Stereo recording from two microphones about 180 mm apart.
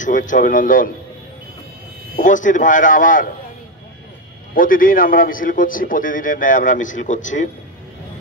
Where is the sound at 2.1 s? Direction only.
45° left (ahead or behind).